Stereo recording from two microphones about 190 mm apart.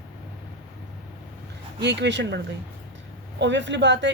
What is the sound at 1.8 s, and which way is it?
Speech, 65° right (ahead or behind).